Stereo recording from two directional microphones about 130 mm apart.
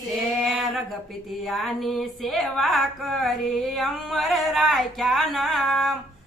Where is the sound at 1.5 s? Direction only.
Centre (ahead or behind).